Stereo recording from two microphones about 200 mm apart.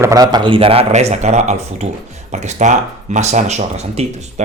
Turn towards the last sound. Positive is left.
turn(degrees=-35)  # may be behind; listen again after turning